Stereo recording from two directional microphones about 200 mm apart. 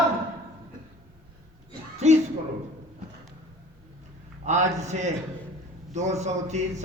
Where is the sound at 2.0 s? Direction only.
35° right (ahead or behind).